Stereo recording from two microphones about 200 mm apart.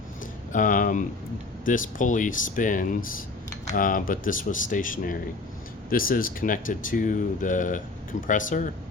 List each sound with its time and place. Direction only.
0.5 s speech: 40° left (ahead or behind)